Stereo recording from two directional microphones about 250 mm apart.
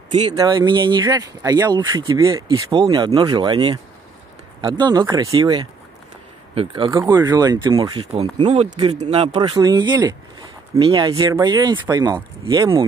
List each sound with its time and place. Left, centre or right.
0.1 s speech: centre